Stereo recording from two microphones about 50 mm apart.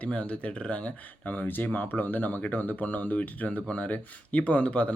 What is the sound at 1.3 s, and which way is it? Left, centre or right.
Speech, left.